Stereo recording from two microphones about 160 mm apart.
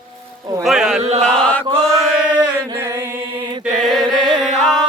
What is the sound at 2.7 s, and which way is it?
Music, 15° right (ahead or behind).